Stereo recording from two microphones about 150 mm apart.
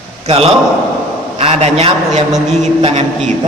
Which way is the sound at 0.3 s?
40° right (ahead or behind).